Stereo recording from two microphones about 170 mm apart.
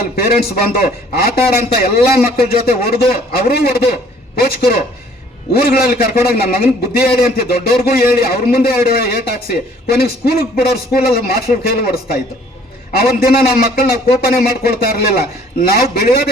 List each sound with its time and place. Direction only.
0.2 s a man's voice: 65° left (ahead or behind)